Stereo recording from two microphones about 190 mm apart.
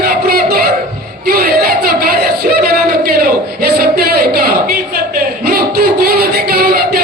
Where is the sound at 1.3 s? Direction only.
50° right (ahead or behind).